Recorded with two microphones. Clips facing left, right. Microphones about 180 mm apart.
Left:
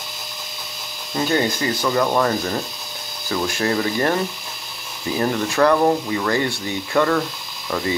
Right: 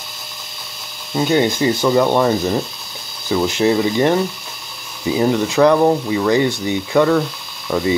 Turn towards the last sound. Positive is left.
turn(degrees=-10)  # may be behind; listen again after turning